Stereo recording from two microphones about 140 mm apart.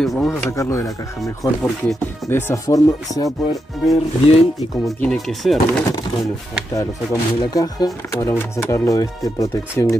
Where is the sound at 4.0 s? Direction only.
45° left (ahead or behind).